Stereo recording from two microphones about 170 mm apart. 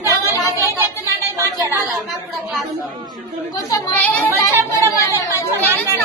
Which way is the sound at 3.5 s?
15° left (ahead or behind).